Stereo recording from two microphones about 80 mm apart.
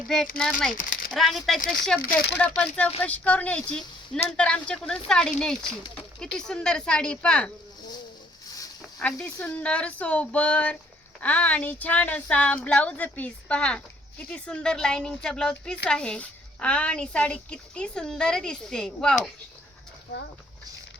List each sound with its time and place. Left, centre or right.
0.1 s speech: centre
2.6 s a woman's voice: centre
8.8 s a sound: centre
9.4 s a woman's voice: centre